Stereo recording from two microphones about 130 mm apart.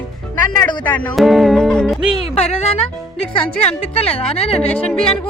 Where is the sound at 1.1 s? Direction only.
Centre (ahead or behind).